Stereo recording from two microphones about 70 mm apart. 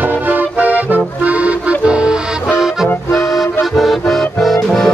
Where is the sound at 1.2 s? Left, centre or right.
Centre.